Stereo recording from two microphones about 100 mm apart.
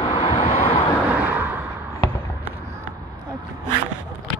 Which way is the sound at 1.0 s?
15° right (ahead or behind).